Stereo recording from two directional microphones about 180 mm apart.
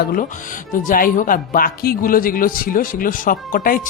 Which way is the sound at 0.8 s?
50° left (ahead or behind).